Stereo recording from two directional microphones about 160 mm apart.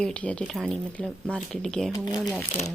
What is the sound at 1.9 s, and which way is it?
Speech, 25° left (ahead or behind).